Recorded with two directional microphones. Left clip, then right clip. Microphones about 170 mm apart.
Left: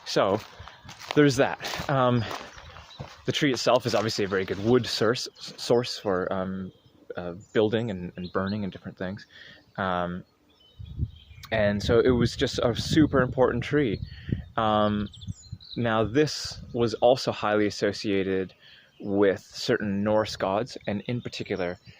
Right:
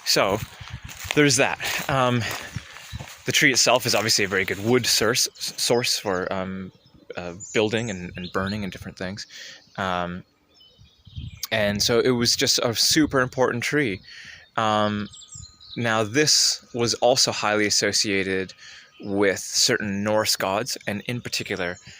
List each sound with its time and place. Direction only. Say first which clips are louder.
0.0 s speech: right 3 dB; 20° right (ahead or behind)
1.0 s walk: right 2 dB; 10° right (ahead or behind)
2.9 s a sound: right 7 dB; 5° right (ahead or behind)
3.5 s speech: right 3 dB; 15° right (ahead or behind)
8.8 s speech: right 3 dB; 30° right (ahead or behind)
11.4 s speech: right 3 dB; 30° right (ahead or behind); by 21.8 s 10° right (ahead or behind)